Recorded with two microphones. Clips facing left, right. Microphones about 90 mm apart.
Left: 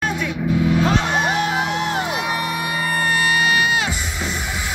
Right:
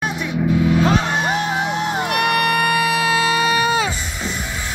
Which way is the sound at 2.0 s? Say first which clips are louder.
Right 5 dB; 65° right (ahead or behind).